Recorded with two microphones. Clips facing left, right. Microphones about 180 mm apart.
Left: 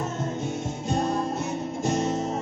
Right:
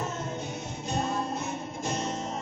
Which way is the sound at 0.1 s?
45° left (ahead or behind).